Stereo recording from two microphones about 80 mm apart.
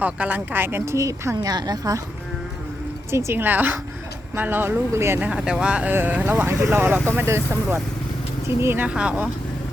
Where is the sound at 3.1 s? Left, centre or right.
Right.